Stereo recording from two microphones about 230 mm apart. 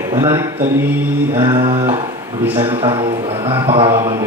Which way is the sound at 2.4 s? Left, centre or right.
Centre.